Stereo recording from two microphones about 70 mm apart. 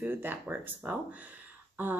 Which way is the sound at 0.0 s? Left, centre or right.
Right.